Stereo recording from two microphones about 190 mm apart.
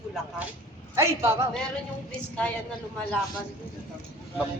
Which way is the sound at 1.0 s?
15° right (ahead or behind).